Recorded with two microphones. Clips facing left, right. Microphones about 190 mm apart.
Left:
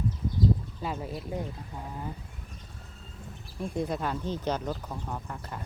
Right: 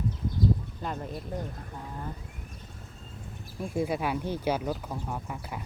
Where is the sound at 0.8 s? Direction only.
5° left (ahead or behind).